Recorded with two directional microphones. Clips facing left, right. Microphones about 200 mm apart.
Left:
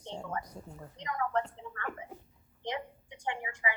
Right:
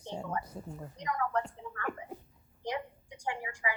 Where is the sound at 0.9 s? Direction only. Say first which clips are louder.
Even; 25° left (ahead or behind).